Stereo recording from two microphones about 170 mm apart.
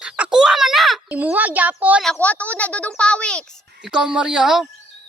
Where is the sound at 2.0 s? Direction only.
10° left (ahead or behind).